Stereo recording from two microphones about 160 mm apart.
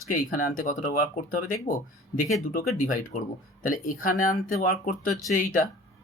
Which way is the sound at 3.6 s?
60° left (ahead or behind).